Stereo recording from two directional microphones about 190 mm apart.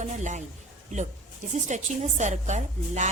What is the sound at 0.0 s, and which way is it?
Speech, 40° right (ahead or behind).